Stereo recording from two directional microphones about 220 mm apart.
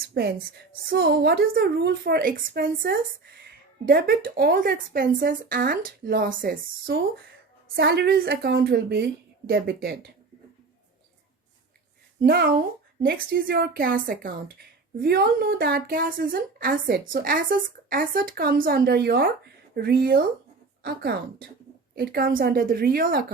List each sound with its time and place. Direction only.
0.1 s a woman's voice: 45° right (ahead or behind)
12.2 s a woman's voice: 45° right (ahead or behind)